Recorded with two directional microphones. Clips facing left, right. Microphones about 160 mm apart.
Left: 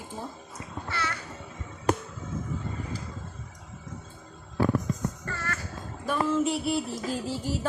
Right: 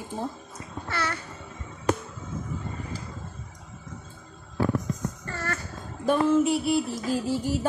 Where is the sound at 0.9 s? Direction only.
40° right (ahead or behind).